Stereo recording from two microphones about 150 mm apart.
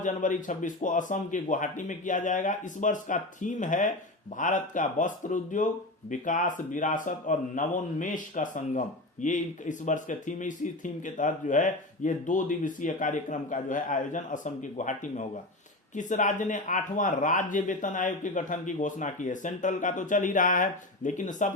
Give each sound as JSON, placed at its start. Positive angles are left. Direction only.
{"t": 0.0, "sound": "speech", "side_deg": 60}